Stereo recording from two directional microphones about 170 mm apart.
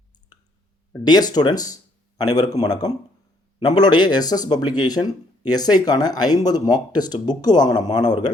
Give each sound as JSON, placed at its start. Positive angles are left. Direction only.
{"t": 1.0, "sound": "speech", "side_deg": 25}